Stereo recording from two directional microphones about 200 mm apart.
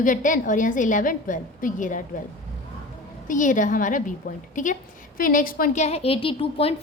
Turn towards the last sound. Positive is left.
turn(degrees=25)  # may be behind; listen again after turning